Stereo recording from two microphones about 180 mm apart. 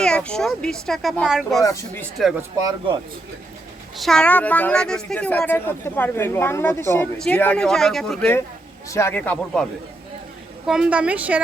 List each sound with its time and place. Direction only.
0.0 s speech: 5° left (ahead or behind)
1.6 s speech: 15° left (ahead or behind)
2.6 s speech: 25° right (ahead or behind)
3.9 s speech: centre (ahead or behind)
8.9 s speech: 15° left (ahead or behind)
10.7 s a woman's voice: 5° right (ahead or behind)